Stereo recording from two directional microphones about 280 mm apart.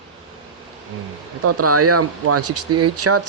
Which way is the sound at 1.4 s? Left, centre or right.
Right.